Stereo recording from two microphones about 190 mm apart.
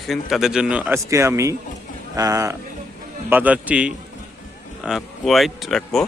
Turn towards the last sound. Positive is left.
turn(degrees=0)  # may be behind; listen again after turning